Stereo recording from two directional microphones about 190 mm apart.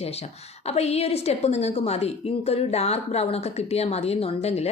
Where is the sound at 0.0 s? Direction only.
35° left (ahead or behind).